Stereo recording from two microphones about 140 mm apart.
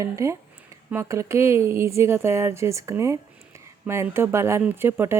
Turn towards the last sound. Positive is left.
turn(degrees=-15)  # may be behind; listen again after turning